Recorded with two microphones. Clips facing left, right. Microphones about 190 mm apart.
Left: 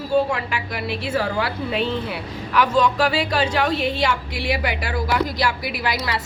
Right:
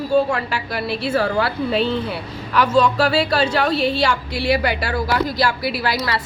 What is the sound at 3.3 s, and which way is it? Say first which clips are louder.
Speech: right 2 dB; 15° left (ahead or behind).